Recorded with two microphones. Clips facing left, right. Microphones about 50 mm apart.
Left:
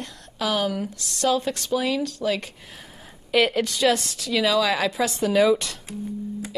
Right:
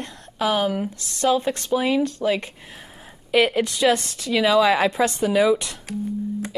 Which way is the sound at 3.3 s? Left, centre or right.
Centre.